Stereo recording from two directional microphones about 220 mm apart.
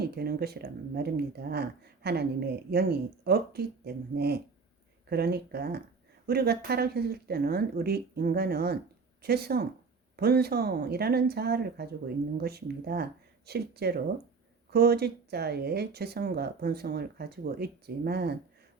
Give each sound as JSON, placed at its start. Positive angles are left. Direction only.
{"t": 0.0, "sound": "speech", "side_deg": -45}